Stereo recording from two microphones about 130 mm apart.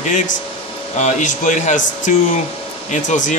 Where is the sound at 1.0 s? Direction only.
75° left (ahead or behind).